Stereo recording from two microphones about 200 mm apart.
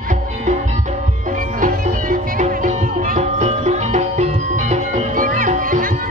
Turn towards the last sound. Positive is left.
turn(degrees=-40)  # may be behind; listen again after turning